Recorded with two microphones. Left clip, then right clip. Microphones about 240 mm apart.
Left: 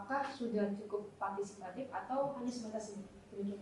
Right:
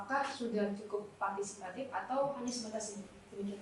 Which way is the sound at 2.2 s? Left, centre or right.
Left.